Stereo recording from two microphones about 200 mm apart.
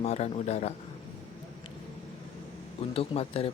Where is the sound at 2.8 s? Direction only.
30° left (ahead or behind).